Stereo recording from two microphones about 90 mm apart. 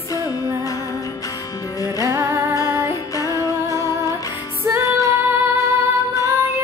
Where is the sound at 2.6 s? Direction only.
40° left (ahead or behind).